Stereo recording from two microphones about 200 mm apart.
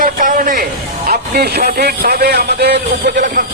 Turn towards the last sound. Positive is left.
turn(degrees=-50)  # may be behind; listen again after turning